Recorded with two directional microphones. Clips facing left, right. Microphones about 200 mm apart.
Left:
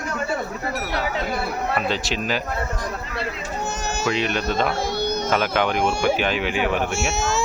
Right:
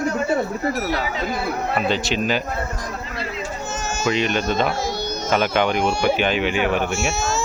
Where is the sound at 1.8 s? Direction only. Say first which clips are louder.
Right 3 dB; centre (ahead or behind).